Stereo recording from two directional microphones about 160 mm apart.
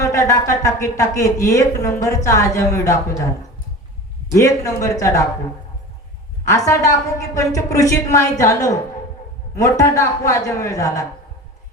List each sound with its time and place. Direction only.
0.0 s speech: 20° left (ahead or behind)
4.3 s speech: 20° left (ahead or behind)
6.5 s speech: 20° left (ahead or behind)